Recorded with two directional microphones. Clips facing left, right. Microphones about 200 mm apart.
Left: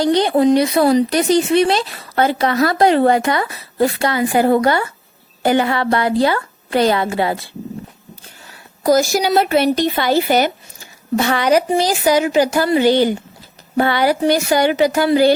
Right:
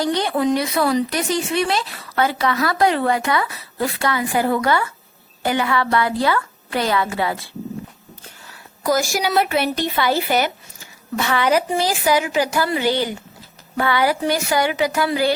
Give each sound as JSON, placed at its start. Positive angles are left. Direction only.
{"t": 0.0, "sound": "a woman's voice", "side_deg": 30}
{"t": 2.1, "sound": "a woman's voice", "side_deg": 40}
{"t": 2.7, "sound": "a woman's voice", "side_deg": 30}
{"t": 3.2, "sound": "a woman's voice", "side_deg": 40}
{"t": 8.8, "sound": "a woman's voice", "side_deg": 35}
{"t": 10.1, "sound": "speech", "side_deg": 25}
{"t": 11.2, "sound": "a woman's voice", "side_deg": 40}
{"t": 12.8, "sound": "speech", "side_deg": 25}
{"t": 13.7, "sound": "a woman's voice", "side_deg": 35}